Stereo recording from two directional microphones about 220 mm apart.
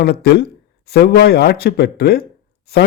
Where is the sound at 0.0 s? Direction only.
45° left (ahead or behind).